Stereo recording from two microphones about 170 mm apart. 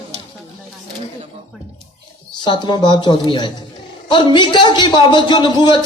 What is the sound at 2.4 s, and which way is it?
A man's voice, 25° left (ahead or behind).